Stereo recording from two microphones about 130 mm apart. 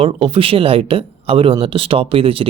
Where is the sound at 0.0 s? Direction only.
50° right (ahead or behind).